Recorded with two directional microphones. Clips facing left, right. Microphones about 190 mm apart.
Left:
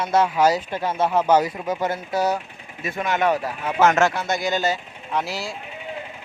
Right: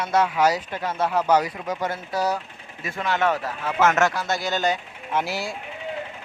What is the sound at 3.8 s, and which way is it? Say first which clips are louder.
Speech: left 2 dB; 30° left (ahead or behind).